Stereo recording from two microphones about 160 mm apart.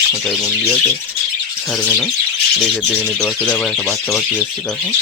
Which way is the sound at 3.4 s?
Centre (ahead or behind).